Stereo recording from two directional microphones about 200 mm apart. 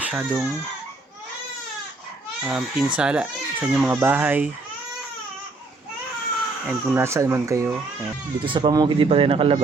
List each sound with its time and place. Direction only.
0.0 s speech: 5° right (ahead or behind)
2.4 s speech: 5° right (ahead or behind)
6.7 s speech: 15° right (ahead or behind)